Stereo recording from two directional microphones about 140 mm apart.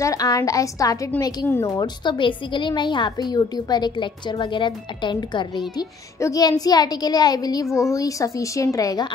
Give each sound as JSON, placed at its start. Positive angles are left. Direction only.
{"t": 0.0, "sound": "a woman's voice", "side_deg": 25}
{"t": 2.0, "sound": "a woman's voice", "side_deg": 35}